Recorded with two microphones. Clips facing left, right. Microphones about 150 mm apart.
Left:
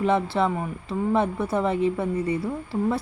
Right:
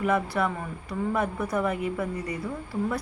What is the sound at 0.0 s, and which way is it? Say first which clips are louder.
A woman's voice: left 3 dB; 25° left (ahead or behind).